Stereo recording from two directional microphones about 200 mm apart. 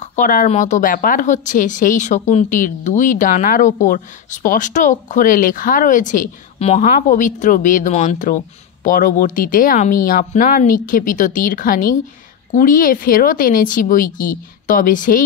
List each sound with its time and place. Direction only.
0.0 s a woman's voice: 40° left (ahead or behind)